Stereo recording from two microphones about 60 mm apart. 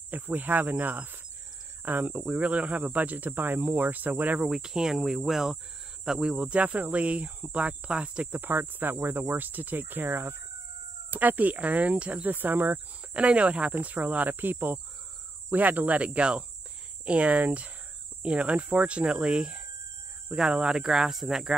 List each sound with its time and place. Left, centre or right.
0.1 s speech: right
2.1 s speech: right
4.4 s speech: centre
8.4 s speech: right
12.7 s speech: centre